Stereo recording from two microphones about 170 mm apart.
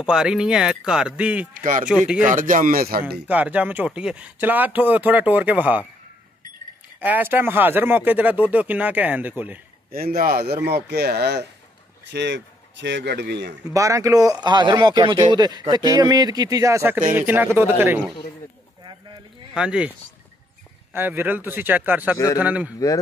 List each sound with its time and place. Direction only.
0.0 s speech: 5° right (ahead or behind)
1.5 s speech: 50° right (ahead or behind)
1.9 s speech: 5° right (ahead or behind)
2.2 s speech: 50° right (ahead or behind)
3.3 s speech: 10° right (ahead or behind)
7.0 s speech: 10° right (ahead or behind)
9.9 s speech: 60° right (ahead or behind)
12.1 s speech: 90° right
13.7 s speech: 20° right (ahead or behind)
19.5 s speech: 5° right (ahead or behind)
20.9 s speech: 10° right (ahead or behind)
22.1 s a man's voice: 20° left (ahead or behind)
22.4 s speech: 10° right (ahead or behind)